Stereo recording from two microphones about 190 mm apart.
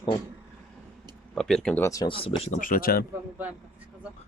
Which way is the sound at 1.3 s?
5° left (ahead or behind).